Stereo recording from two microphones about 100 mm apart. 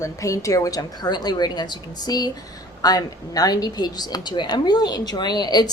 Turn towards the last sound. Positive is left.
turn(degrees=45)  # may be behind; listen again after turning